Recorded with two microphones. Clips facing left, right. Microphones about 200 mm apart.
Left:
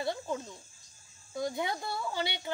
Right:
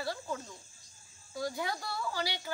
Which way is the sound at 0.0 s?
20° left (ahead or behind).